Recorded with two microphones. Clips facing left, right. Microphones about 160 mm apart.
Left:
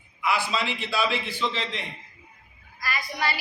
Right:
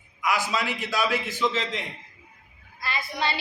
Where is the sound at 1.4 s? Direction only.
15° right (ahead or behind).